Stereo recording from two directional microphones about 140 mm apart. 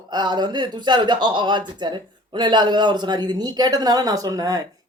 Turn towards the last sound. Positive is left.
turn(degrees=-25)  # may be behind; listen again after turning